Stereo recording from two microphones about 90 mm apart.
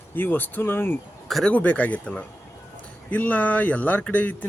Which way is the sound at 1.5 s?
15° left (ahead or behind).